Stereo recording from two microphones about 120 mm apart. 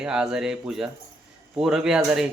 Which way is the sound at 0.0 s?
5° right (ahead or behind).